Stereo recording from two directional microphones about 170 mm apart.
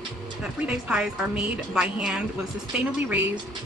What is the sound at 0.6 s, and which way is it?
A woman's voice, 5° right (ahead or behind).